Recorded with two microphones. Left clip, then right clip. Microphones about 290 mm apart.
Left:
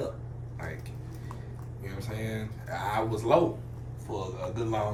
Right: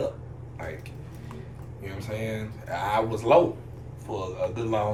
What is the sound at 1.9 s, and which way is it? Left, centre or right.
Speech, centre.